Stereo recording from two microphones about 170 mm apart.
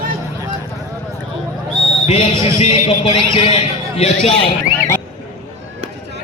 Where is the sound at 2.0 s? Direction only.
35° left (ahead or behind).